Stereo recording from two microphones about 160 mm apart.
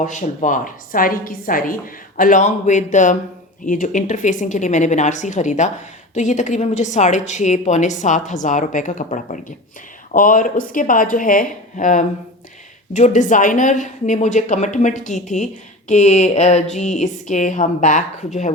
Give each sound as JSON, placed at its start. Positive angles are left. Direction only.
{"t": 0.0, "sound": "a woman's voice", "side_deg": 50}